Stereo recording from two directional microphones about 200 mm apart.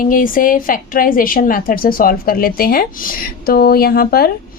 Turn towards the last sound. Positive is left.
turn(degrees=50)  # may be behind; listen again after turning